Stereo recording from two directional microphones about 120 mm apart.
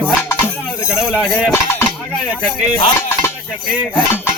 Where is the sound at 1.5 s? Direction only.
20° left (ahead or behind).